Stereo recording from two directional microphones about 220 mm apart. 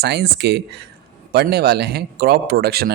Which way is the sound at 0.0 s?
50° right (ahead or behind).